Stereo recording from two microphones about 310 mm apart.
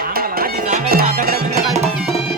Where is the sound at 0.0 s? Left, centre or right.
Right.